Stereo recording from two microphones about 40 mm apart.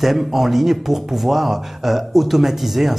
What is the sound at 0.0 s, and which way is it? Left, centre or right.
A man's voice, centre.